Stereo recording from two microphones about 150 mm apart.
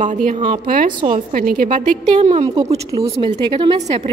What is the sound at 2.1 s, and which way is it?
Speech, 45° right (ahead or behind).